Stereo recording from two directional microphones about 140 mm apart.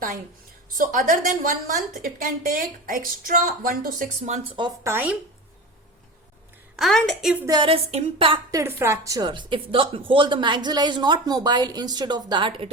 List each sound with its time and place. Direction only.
0.8 s a woman's voice: 70° right (ahead or behind); by 4.0 s 90° right
4.5 s speech: 35° right (ahead or behind)
4.9 s speech: 15° right (ahead or behind)
6.7 s a woman's voice: 5° left (ahead or behind)
7.5 s speech: 40° right (ahead or behind)
8.4 s speech: 20° right (ahead or behind); by 12.7 s 40° right (ahead or behind)